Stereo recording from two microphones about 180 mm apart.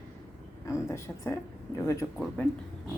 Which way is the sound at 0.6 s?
15° left (ahead or behind).